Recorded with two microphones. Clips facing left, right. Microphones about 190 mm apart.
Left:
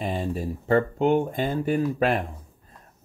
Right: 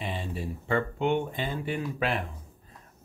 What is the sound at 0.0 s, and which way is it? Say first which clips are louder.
Speech: left 6 dB; 45° left (ahead or behind).